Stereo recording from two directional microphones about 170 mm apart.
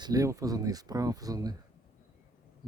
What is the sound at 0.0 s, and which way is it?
Speech, 20° right (ahead or behind).